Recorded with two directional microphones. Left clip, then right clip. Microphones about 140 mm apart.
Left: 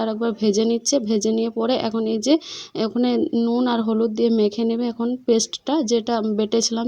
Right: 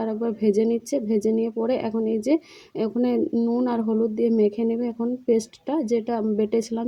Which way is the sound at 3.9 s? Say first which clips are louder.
Left 1 dB; 35° left (ahead or behind).